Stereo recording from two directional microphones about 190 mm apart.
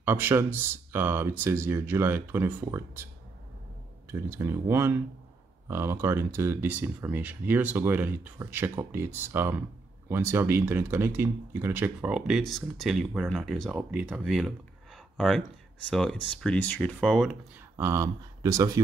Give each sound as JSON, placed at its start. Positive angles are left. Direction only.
{"t": 0.0, "sound": "speech", "side_deg": -10}
{"t": 4.1, "sound": "speech", "side_deg": -10}
{"t": 17.7, "sound": "speech", "side_deg": -15}